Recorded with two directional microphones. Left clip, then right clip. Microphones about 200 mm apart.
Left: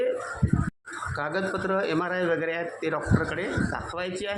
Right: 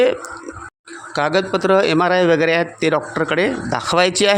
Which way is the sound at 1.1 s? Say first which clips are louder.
Right 12 dB; 35° right (ahead or behind).